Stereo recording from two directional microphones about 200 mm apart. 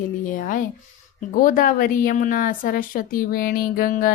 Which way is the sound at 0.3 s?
40° left (ahead or behind).